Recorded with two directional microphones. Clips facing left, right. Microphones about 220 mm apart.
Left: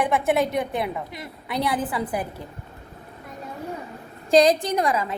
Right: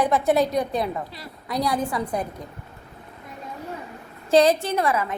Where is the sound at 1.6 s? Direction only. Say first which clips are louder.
Right 1 dB; 5° left (ahead or behind).